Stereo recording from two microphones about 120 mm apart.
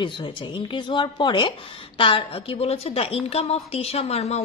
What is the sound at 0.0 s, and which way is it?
A woman's voice, 40° left (ahead or behind).